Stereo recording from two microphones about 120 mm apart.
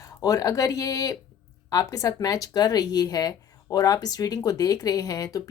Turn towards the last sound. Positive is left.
turn(degrees=30)  # may be behind; listen again after turning